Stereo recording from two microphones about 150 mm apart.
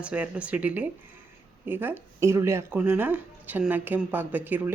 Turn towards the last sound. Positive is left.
turn(degrees=-10)  # may be behind; listen again after turning